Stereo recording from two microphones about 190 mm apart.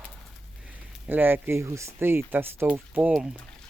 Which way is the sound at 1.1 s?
10° right (ahead or behind).